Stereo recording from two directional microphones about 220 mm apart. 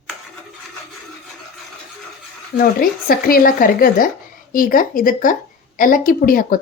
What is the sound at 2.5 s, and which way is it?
A woman's voice, 40° left (ahead or behind).